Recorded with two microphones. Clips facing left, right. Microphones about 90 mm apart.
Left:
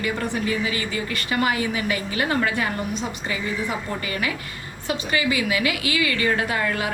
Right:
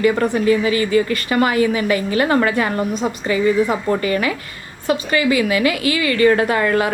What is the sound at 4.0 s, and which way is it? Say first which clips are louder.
A woman's voice: right 8 dB; 50° right (ahead or behind).